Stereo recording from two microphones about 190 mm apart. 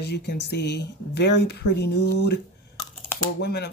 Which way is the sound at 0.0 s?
60° left (ahead or behind).